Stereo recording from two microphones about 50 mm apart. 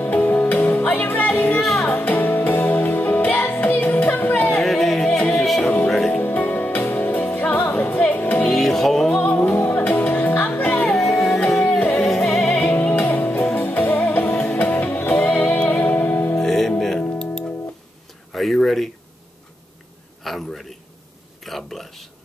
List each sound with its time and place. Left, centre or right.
0.0 s music: left
1.6 s music: centre
1.9 s music: left
4.6 s a sound: centre
5.3 s music: centre
6.1 s music: left
8.5 s music: centre
9.2 s music: left
10.9 s music: centre
12.8 s music: left
16.3 s music: centre
18.3 s a sound: centre
20.2 s a sound: centre